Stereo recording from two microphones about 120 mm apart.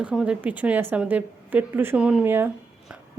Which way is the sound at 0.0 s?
5° right (ahead or behind).